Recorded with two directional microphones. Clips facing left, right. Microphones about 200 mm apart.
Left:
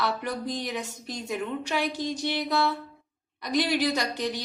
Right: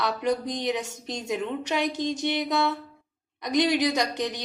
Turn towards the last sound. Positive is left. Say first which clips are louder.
# right 2 dB
turn(degrees=-20)  # may be behind; listen again after turning